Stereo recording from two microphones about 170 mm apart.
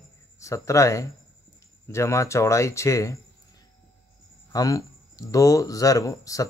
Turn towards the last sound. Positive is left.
turn(degrees=20)  # may be behind; listen again after turning